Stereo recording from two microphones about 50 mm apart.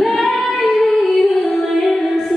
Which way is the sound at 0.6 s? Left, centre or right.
Centre.